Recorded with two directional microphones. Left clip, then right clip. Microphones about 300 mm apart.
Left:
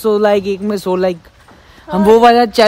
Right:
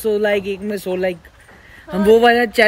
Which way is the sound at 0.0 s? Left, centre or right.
Centre.